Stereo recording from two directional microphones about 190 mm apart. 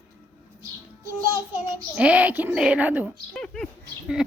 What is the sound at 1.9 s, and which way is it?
Speech, 5° right (ahead or behind).